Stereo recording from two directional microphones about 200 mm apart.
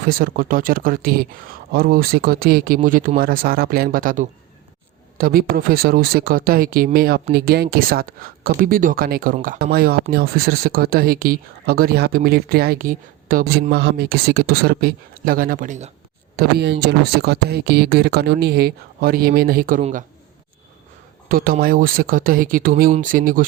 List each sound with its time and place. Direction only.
0.0 s speech: 45° right (ahead or behind)
16.3 s speech: 50° right (ahead or behind)
21.2 s speech: 45° right (ahead or behind)